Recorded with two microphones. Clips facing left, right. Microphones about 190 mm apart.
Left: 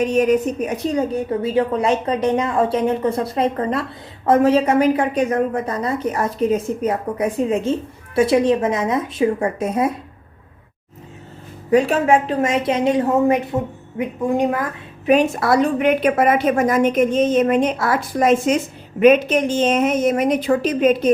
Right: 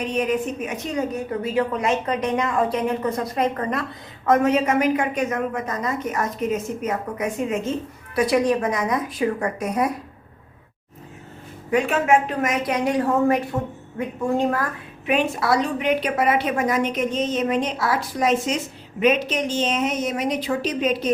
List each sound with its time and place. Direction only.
0.0 s a woman's voice: 45° left (ahead or behind); by 9.9 s 25° left (ahead or behind)
11.7 s a woman's voice: 35° left (ahead or behind); by 14.7 s 15° left (ahead or behind)
15.0 s a woman's voice: 40° left (ahead or behind)